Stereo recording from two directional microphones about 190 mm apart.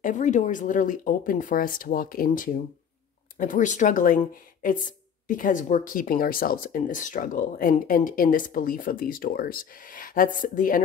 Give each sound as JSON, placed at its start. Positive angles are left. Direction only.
{"t": 0.0, "sound": "speech", "side_deg": 40}